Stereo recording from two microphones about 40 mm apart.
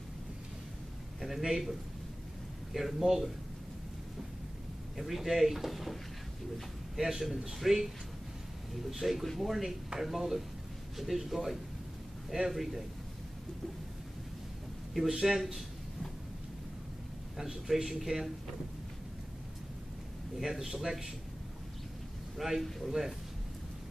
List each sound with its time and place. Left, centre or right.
1.2 s a man's voice: centre
4.9 s speech: centre
7.0 s a man's voice: centre
9.0 s a man's voice: centre
15.0 s a man's voice: centre
17.4 s a man's voice: centre
20.3 s a man's voice: centre
22.4 s a man's voice: centre